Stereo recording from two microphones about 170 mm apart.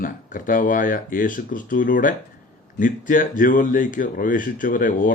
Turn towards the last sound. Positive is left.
turn(degrees=50)  # may be behind; listen again after turning